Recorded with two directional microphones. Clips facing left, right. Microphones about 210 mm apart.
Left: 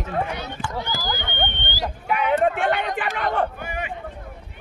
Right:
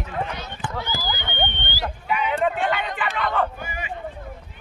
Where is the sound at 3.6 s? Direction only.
60° left (ahead or behind).